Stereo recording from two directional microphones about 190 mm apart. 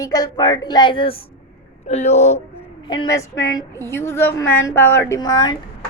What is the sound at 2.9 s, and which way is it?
A woman's voice, 20° left (ahead or behind).